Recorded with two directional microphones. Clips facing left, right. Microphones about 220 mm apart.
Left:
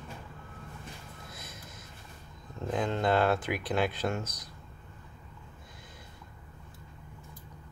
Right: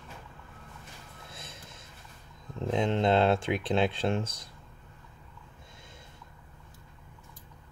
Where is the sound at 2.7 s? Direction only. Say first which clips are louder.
Right 3 dB; 25° right (ahead or behind).